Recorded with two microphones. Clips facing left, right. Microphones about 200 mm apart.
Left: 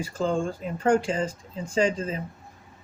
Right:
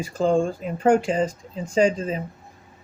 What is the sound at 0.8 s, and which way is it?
Speech, 20° right (ahead or behind).